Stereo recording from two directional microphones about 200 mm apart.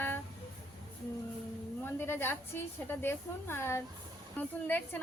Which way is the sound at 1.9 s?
10° left (ahead or behind).